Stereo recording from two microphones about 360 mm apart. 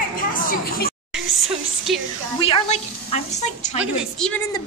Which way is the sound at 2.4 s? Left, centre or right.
Centre.